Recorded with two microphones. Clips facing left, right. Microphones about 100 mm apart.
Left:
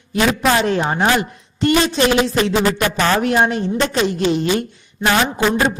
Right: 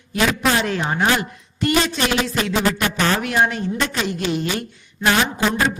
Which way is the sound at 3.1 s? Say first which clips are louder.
Left 4 dB; 30° left (ahead or behind).